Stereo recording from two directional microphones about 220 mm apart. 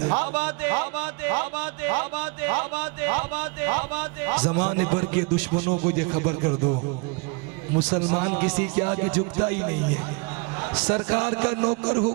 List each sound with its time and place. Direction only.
0.0 s a man's voice: 20° right (ahead or behind)
0.3 s a sound: 10° right (ahead or behind)
5.5 s a man's voice: 30° right (ahead or behind)
7.9 s a man's voice: 25° right (ahead or behind)